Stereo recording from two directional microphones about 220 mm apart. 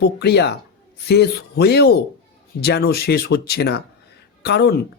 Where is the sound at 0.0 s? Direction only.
50° left (ahead or behind).